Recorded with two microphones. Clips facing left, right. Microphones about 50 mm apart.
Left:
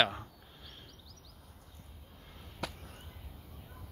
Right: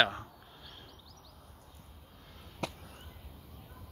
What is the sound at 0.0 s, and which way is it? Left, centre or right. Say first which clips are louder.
Chop: right 2 dB; centre.